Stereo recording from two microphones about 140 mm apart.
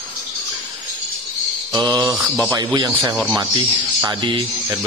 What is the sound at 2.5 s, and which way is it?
Speech, 30° right (ahead or behind).